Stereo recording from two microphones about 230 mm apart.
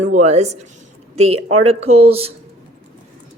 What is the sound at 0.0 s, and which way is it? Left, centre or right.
Speech, right.